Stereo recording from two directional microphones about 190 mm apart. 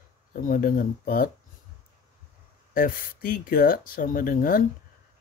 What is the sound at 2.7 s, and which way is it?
Speech, 50° left (ahead or behind).